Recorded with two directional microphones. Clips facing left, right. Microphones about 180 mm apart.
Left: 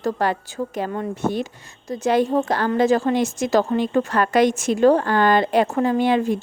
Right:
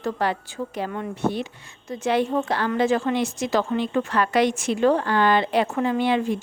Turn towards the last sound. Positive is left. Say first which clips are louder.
# left 3 dB
turn(degrees=45)  # may be behind; listen again after turning